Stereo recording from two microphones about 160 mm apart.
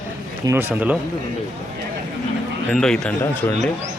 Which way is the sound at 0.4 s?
15° right (ahead or behind).